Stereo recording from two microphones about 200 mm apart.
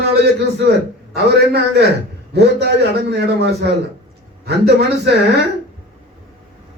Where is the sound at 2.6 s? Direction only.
55° right (ahead or behind).